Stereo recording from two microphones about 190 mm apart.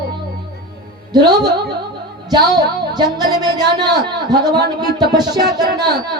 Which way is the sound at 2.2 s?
20° right (ahead or behind).